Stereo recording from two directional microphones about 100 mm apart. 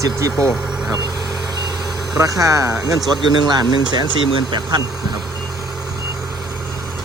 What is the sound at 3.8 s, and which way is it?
Speech, 50° right (ahead or behind).